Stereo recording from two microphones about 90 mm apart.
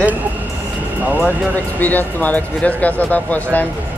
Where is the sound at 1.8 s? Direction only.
20° left (ahead or behind).